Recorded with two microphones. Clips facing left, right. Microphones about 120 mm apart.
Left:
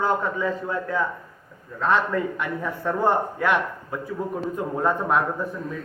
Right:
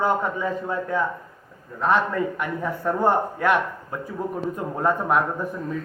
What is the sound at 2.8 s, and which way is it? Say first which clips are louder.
Speech: right 1 dB; 10° right (ahead or behind).